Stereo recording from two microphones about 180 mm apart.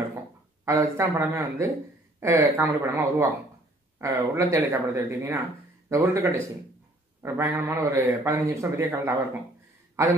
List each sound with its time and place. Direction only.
0.7 s a man's voice: 15° right (ahead or behind)